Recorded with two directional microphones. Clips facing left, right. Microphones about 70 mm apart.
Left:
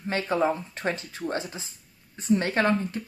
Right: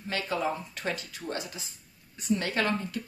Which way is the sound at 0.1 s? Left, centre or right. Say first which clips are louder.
Left 5 dB; left.